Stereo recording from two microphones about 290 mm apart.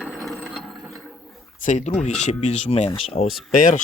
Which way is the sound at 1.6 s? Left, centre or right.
Left.